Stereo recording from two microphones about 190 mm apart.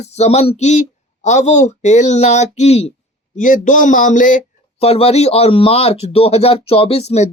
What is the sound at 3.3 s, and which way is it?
Speech, 45° left (ahead or behind).